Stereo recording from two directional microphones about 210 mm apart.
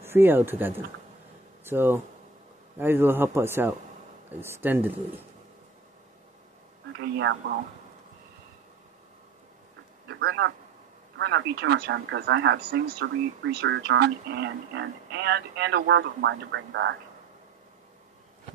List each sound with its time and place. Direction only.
0.0 s a man's voice: 10° right (ahead or behind)
6.9 s speech: 55° right (ahead or behind)
10.0 s a sound: 55° right (ahead or behind)
11.1 s speech: 55° right (ahead or behind)